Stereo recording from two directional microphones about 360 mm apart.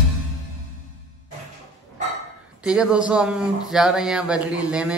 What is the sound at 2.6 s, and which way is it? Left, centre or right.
A man's voice, centre.